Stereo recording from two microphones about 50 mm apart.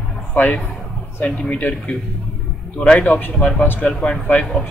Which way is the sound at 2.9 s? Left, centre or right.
Left.